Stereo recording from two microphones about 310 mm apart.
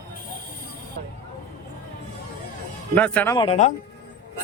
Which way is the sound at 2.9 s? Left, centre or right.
Centre.